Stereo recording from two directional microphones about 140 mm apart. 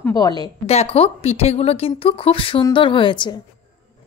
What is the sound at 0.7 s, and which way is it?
A woman's voice, 45° left (ahead or behind).